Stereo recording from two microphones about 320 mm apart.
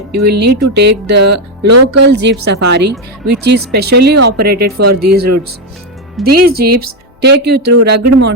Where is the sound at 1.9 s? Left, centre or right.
Right.